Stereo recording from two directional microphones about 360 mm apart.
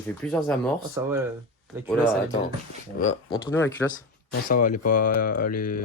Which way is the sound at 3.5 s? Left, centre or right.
Centre.